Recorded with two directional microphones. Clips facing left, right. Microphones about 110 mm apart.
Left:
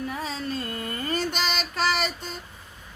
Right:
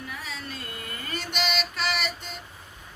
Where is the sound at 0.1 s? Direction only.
35° left (ahead or behind).